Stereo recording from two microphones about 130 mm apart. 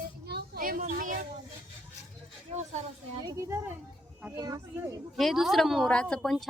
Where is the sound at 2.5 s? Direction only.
60° right (ahead or behind).